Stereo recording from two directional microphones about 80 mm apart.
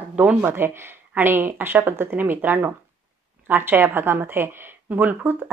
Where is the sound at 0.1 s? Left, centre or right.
Centre.